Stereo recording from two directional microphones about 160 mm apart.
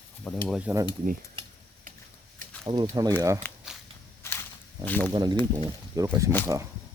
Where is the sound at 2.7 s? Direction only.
40° right (ahead or behind).